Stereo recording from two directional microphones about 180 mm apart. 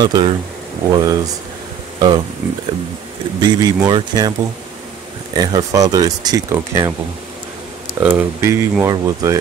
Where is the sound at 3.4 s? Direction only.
25° right (ahead or behind).